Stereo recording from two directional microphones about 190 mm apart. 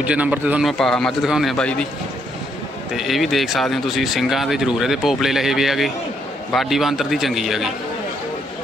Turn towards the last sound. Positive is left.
turn(degrees=0)  # may be behind; listen again after turning